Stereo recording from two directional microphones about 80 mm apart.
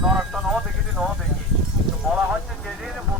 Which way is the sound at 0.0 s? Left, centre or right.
Centre.